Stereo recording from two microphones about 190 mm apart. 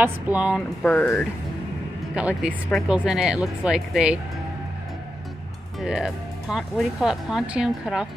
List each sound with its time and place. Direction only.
0.0 s speech: 5° right (ahead or behind)
0.8 s speech: 5° left (ahead or behind)
2.1 s speech: 5° right (ahead or behind)
5.8 s speech: 5° right (ahead or behind)